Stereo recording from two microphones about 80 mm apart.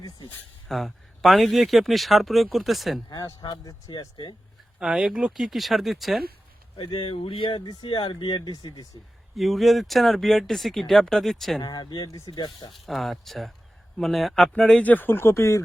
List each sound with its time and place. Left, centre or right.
0.7 s speech: centre
3.1 s speech: left
4.8 s speech: centre
6.7 s speech: left
9.3 s speech: centre
11.6 s speech: left
12.7 s speech: centre
14.8 s speech: left